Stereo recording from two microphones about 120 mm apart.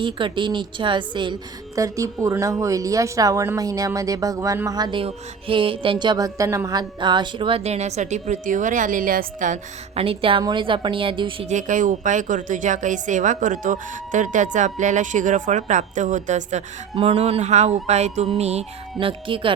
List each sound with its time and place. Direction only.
0.0 s a woman's voice: 45° right (ahead or behind)
1.7 s speech: 25° right (ahead or behind); by 7.6 s 45° right (ahead or behind)
7.6 s a woman's voice: 65° right (ahead or behind); by 10.0 s 90° right
10.0 s a woman's voice: 50° right (ahead or behind)
11.4 s a woman's voice: 90° right; by 18.3 s 65° right (ahead or behind)
18.3 s music: 60° right (ahead or behind)
18.9 s a woman's voice: 45° right (ahead or behind)